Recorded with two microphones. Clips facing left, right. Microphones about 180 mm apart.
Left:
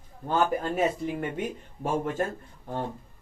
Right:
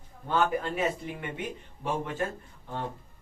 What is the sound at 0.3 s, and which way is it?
Speech, 45° left (ahead or behind).